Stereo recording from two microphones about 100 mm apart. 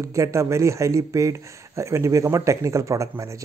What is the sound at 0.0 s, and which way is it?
Speech, 30° right (ahead or behind).